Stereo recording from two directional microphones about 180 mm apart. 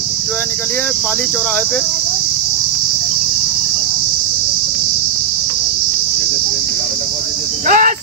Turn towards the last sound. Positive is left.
turn(degrees=-50)  # may be behind; listen again after turning